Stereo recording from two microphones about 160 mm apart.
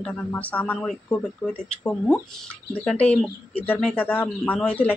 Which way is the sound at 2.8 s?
5° left (ahead or behind).